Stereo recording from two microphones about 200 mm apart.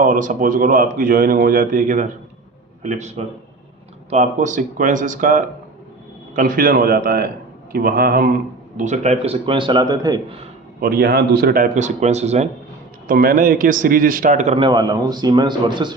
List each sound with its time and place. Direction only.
0.0 s a man's voice: 40° right (ahead or behind)
8.8 s a man's voice: 35° right (ahead or behind)
10.8 s speech: 50° right (ahead or behind)
13.1 s a man's voice: 45° right (ahead or behind)
14.6 s a man's voice: 20° right (ahead or behind)